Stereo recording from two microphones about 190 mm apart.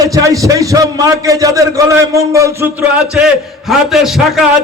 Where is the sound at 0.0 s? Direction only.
15° right (ahead or behind).